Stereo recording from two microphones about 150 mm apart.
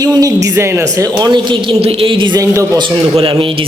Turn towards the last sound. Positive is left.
turn(degrees=-35)  # may be behind; listen again after turning